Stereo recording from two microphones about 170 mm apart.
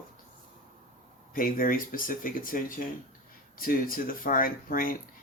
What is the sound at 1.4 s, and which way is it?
Speech, 55° left (ahead or behind).